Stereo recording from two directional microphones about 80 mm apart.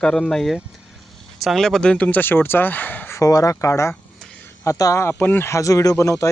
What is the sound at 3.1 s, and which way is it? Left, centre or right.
Speech, left.